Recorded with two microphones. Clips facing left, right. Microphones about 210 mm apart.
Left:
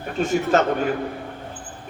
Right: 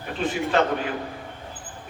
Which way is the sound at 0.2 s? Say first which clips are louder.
Left 3 dB; 45° left (ahead or behind).